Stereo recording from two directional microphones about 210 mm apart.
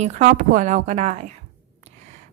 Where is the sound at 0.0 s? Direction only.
35° right (ahead or behind).